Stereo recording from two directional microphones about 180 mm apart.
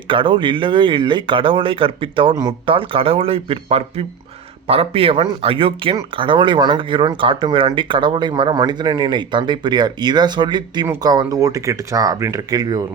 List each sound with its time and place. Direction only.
0.1 s speech: 30° right (ahead or behind)